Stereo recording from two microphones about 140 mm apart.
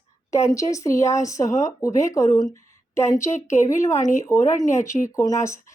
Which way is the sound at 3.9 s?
60° left (ahead or behind).